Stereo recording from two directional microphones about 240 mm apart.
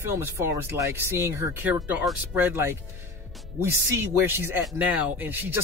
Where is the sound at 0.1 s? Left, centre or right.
Centre.